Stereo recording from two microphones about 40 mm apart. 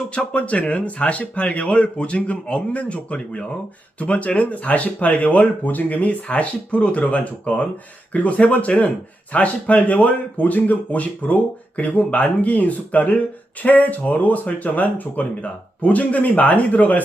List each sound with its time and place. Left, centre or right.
0.3 s speech: left